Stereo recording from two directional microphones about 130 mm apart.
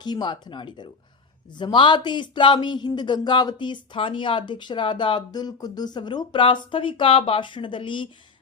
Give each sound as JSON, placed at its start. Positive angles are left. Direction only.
{"t": 0.0, "sound": "speech", "side_deg": 35}